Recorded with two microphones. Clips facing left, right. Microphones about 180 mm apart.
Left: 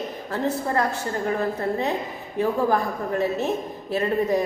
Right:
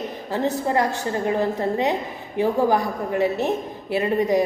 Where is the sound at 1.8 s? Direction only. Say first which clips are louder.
Right 3 dB; 80° right.